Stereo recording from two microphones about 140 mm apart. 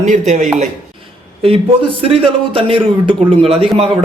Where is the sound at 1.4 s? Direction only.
45° right (ahead or behind).